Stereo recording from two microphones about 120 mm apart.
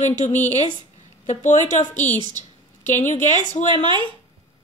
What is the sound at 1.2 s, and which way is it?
A woman's voice, 90° left.